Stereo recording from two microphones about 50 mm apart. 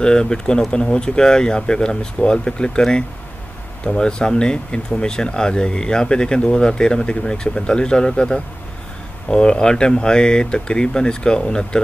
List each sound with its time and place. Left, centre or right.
0.0 s speech: centre